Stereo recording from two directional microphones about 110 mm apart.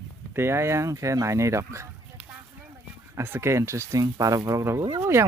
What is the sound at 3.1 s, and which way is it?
Speech, 20° right (ahead or behind).